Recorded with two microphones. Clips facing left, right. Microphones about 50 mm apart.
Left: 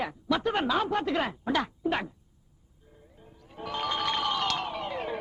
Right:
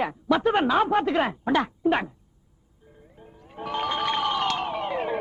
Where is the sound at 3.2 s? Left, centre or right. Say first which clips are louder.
Right 4 dB; right.